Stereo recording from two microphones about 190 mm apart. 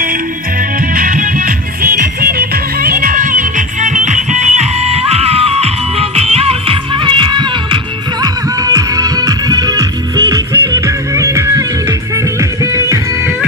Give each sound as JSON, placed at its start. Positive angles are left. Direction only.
{"t": 0.9, "sound": "music", "side_deg": -45}